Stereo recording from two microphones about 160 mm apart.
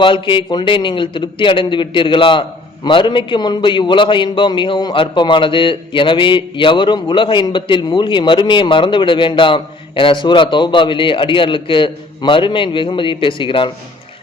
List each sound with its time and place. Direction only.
0.0 s a man's voice: 30° left (ahead or behind)